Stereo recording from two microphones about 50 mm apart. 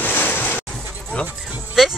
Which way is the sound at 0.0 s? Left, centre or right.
Left.